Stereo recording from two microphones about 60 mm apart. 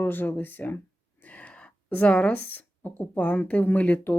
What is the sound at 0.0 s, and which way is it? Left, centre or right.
Speech, left.